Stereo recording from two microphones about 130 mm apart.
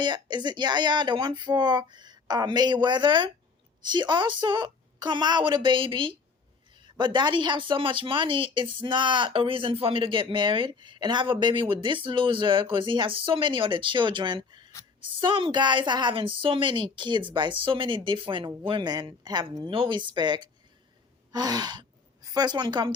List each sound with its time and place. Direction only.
0.0 s speech: 35° right (ahead or behind)